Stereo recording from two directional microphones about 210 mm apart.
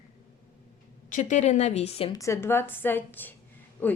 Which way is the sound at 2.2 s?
15° left (ahead or behind).